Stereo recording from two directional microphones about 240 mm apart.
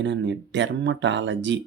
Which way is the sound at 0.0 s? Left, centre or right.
Right.